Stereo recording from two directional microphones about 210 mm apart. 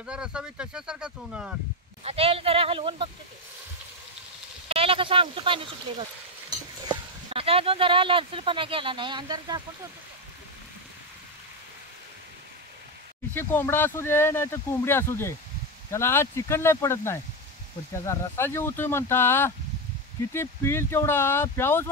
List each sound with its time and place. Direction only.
0.0 s speech: 5° right (ahead or behind)
2.0 s speech: 30° right (ahead or behind)
4.6 s speech: 25° right (ahead or behind)
13.3 s speech: 10° left (ahead or behind)